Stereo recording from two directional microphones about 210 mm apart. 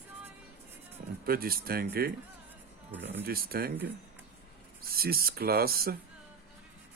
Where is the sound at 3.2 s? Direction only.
45° right (ahead or behind).